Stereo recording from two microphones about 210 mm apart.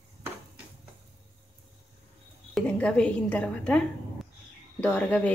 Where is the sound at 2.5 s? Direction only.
5° left (ahead or behind).